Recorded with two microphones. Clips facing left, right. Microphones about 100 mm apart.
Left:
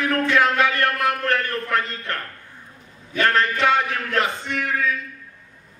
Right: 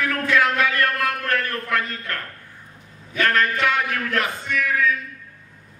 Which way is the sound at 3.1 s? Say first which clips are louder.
Left 1 dB; 30° left (ahead or behind).